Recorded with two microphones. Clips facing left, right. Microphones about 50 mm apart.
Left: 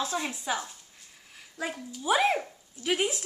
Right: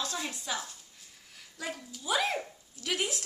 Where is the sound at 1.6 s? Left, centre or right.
Centre.